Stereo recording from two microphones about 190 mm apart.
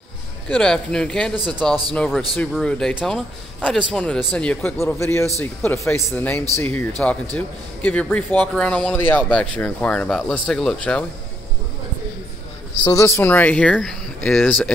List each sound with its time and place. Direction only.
0.5 s speech: 5° left (ahead or behind)
1.3 s speech: 20° right (ahead or behind)
1.6 s speech: 5° left (ahead or behind)
12.8 s speech: 15° left (ahead or behind)